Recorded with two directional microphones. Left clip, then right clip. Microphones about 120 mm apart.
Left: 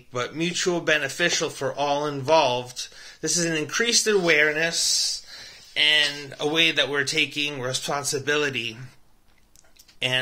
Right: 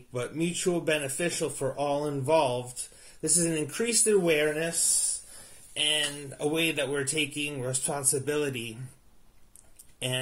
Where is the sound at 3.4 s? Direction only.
20° right (ahead or behind).